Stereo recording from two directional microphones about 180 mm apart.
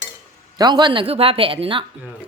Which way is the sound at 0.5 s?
25° right (ahead or behind).